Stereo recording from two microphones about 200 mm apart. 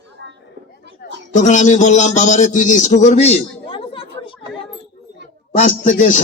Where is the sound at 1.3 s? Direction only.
40° left (ahead or behind).